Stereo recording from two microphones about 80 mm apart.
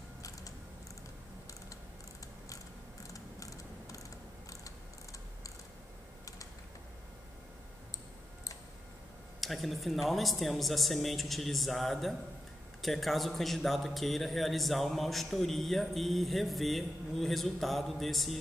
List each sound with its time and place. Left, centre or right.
2.5 s mechanisms: left
9.4 s a man's voice: centre